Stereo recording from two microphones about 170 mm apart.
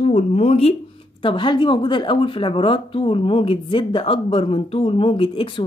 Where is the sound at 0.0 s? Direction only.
40° left (ahead or behind).